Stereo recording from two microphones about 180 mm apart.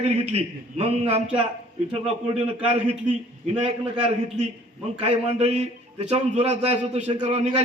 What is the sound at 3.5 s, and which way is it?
A man's voice, 40° right (ahead or behind).